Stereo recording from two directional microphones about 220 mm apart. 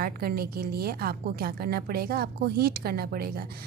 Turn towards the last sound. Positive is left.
turn(degrees=-45)  # may be behind; listen again after turning